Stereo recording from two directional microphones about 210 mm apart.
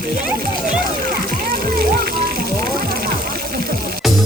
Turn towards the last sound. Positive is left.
turn(degrees=-45)  # may be behind; listen again after turning